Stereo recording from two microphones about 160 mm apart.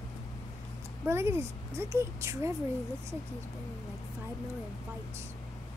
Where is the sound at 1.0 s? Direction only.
15° right (ahead or behind).